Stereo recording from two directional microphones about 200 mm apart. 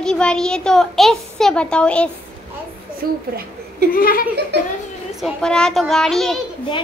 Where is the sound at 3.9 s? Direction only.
45° left (ahead or behind).